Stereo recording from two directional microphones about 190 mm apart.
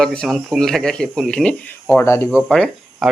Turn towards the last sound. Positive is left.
turn(degrees=5)  # may be behind; listen again after turning